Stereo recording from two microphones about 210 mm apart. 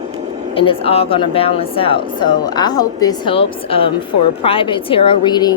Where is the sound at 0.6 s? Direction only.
25° left (ahead or behind).